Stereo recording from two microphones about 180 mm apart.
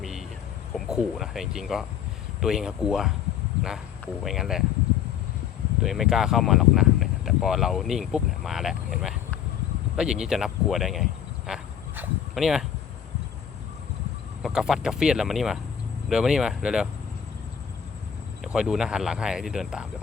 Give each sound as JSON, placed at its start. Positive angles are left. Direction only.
{"t": 0.0, "sound": "a sound", "side_deg": 0}
{"t": 0.7, "sound": "speech", "side_deg": 0}
{"t": 4.2, "sound": "speech", "side_deg": 0}
{"t": 5.8, "sound": "speech", "side_deg": 0}
{"t": 9.9, "sound": "a sound", "side_deg": -5}
{"t": 14.4, "sound": "speech", "side_deg": 0}
{"t": 18.4, "sound": "speech", "side_deg": -5}